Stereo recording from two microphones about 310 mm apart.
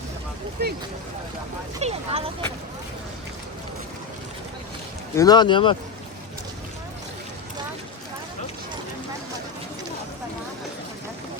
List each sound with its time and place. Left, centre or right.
0.6 s speech: right
1.8 s speech: centre
5.1 s speech: centre